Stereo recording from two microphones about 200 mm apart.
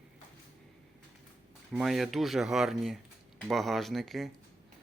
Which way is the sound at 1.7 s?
Centre (ahead or behind).